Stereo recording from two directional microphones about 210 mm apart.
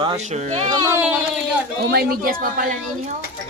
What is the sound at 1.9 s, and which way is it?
A woman's voice, 45° right (ahead or behind).